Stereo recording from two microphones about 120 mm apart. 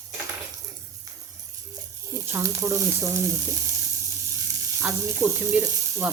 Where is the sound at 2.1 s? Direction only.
20° right (ahead or behind).